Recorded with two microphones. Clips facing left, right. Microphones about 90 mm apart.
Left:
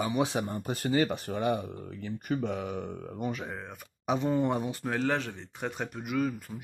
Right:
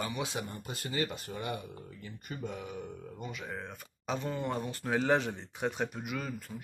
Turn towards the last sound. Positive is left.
turn(degrees=5)  # may be behind; listen again after turning